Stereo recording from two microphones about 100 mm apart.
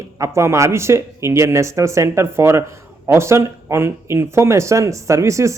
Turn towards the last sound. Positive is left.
turn(degrees=-30)  # may be behind; listen again after turning